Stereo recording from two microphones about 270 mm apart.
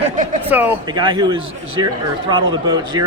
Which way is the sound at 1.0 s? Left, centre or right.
Centre.